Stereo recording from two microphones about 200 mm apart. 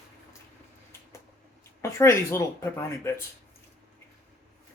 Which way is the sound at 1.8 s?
15° left (ahead or behind).